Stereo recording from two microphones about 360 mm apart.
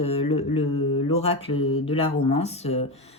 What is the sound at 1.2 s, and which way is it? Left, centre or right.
Speech, centre.